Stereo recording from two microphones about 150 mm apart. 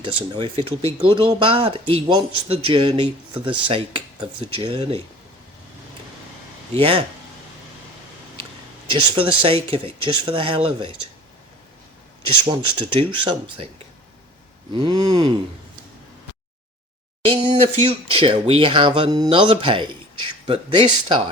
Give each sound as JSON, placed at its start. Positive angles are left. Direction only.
{"t": 0.0, "sound": "speech", "side_deg": -35}
{"t": 6.7, "sound": "speech", "side_deg": -40}
{"t": 8.9, "sound": "speech", "side_deg": -35}
{"t": 12.5, "sound": "speech", "side_deg": -30}
{"t": 14.7, "sound": "speech", "side_deg": -30}
{"t": 17.4, "sound": "speech", "side_deg": -45}